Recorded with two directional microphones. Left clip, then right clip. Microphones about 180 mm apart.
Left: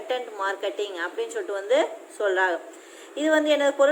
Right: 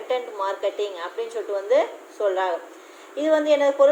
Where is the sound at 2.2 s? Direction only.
40° left (ahead or behind).